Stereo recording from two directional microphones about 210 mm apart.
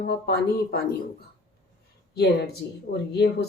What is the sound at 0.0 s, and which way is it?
Speech, 50° left (ahead or behind).